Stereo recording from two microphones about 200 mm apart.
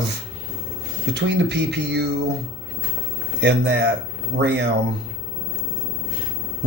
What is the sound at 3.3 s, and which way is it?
A man's voice, 60° right (ahead or behind).